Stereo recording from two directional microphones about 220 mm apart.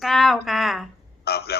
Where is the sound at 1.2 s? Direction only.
45° left (ahead or behind).